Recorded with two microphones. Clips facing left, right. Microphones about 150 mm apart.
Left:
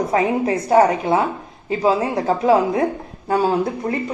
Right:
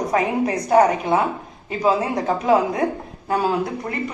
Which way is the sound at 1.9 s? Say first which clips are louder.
Left 1 dB; 30° left (ahead or behind).